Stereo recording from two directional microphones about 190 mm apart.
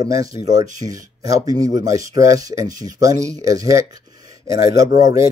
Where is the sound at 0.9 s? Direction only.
20° right (ahead or behind).